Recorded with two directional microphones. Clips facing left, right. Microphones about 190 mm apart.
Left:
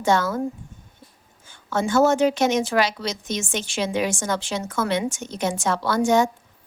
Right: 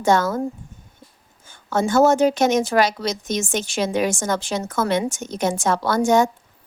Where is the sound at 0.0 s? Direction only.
45° right (ahead or behind).